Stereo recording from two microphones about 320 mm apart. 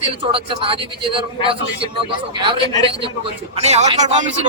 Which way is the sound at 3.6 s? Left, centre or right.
Centre.